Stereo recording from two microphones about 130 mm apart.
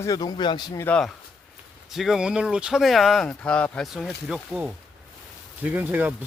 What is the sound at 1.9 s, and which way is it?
Speech, centre (ahead or behind).